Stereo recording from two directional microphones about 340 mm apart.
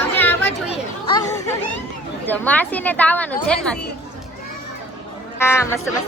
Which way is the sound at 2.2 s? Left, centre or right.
Centre.